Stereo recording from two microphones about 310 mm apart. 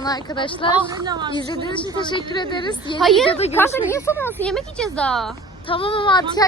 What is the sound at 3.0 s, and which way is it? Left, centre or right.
Speech, centre.